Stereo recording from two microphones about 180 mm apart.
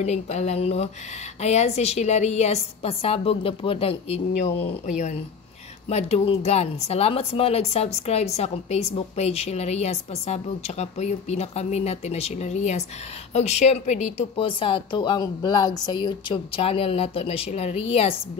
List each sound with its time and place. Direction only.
0.0 s speech: 40° left (ahead or behind)
4.4 s speech: 45° left (ahead or behind)